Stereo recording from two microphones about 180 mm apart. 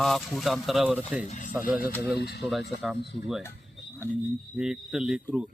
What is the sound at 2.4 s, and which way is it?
Speech, centre (ahead or behind).